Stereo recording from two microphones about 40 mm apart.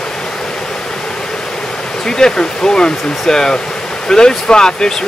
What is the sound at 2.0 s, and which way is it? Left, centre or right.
Speech, centre.